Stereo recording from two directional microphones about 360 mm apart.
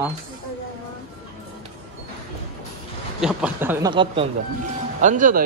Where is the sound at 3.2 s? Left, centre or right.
Centre.